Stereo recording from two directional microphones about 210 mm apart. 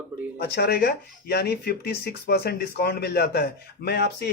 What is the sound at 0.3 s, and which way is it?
Speech, 50° left (ahead or behind).